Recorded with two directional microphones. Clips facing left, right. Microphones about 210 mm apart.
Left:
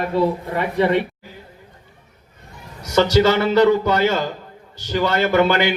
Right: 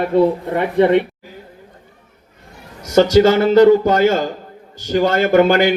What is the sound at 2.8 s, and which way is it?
A man's voice, 50° right (ahead or behind).